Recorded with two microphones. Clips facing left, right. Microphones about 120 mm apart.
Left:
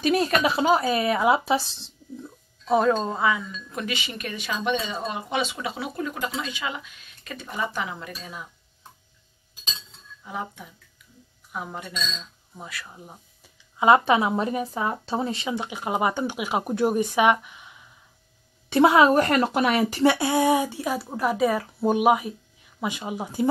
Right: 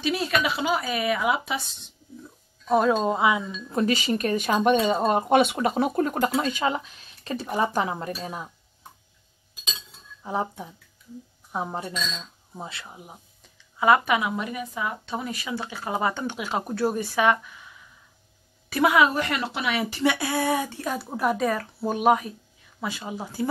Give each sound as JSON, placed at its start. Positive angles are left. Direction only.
{"t": 0.0, "sound": "speech", "side_deg": 45}
{"t": 2.7, "sound": "speech", "side_deg": -5}
{"t": 3.8, "sound": "speech", "side_deg": -40}
{"t": 10.2, "sound": "speech", "side_deg": -35}
{"t": 11.9, "sound": "speech", "side_deg": -10}
{"t": 12.5, "sound": "speech", "side_deg": -25}
{"t": 12.8, "sound": "speech", "side_deg": -10}
{"t": 13.7, "sound": "speech", "side_deg": 25}
{"t": 20.2, "sound": "a woman's voice", "side_deg": 20}